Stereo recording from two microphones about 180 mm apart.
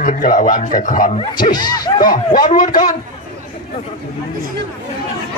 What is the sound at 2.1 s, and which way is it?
Speech, 50° left (ahead or behind).